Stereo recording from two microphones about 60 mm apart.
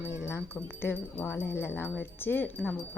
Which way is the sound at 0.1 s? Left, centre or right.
Left.